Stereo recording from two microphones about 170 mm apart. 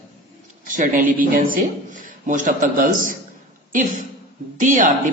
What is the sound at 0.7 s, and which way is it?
A man's voice, 50° right (ahead or behind).